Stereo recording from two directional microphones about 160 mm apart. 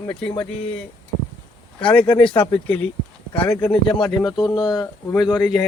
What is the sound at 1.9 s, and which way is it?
Speech, 10° left (ahead or behind).